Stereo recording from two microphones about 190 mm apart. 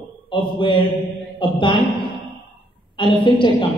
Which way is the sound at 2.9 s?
25° left (ahead or behind).